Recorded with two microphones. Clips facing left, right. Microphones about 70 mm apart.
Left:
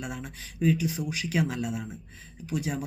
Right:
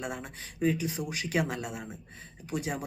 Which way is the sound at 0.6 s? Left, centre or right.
Right.